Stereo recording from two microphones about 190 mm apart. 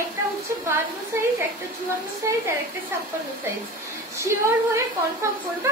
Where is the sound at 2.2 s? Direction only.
15° right (ahead or behind).